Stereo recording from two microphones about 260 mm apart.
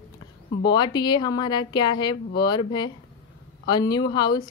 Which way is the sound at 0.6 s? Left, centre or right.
Centre.